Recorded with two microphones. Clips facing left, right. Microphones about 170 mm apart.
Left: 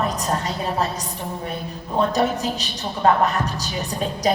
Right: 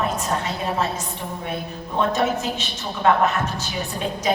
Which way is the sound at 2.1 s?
35° left (ahead or behind).